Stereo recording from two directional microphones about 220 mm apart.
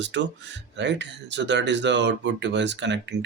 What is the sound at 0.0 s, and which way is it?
Speech, 55° right (ahead or behind).